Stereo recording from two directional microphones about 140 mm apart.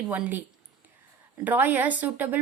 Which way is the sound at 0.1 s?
10° right (ahead or behind).